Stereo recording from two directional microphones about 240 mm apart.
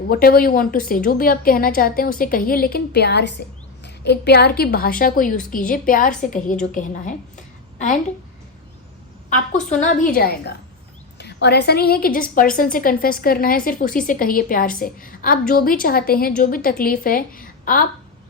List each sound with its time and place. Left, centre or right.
0.1 s a woman's voice: left
9.3 s a woman's voice: left